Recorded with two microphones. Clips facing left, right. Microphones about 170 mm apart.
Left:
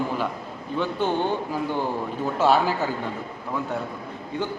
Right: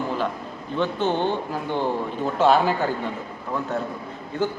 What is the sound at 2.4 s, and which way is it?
Speech, 5° left (ahead or behind).